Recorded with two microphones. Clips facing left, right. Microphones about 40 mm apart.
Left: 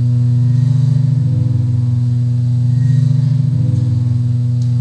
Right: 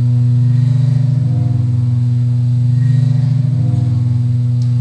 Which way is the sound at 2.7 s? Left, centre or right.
Right.